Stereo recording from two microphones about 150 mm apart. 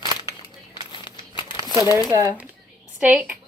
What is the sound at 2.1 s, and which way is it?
Speech, 25° right (ahead or behind).